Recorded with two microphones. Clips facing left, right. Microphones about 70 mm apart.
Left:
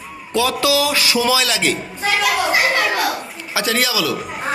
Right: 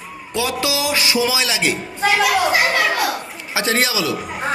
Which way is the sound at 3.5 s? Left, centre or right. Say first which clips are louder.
Even; right.